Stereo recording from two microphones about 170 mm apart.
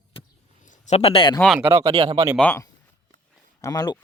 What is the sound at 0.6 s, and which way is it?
Speech, 45° left (ahead or behind).